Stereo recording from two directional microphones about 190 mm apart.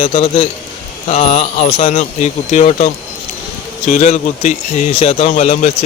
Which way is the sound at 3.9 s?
40° left (ahead or behind).